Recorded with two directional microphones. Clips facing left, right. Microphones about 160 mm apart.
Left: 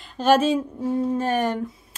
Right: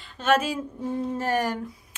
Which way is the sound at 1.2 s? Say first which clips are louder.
Left 3 dB; 20° left (ahead or behind).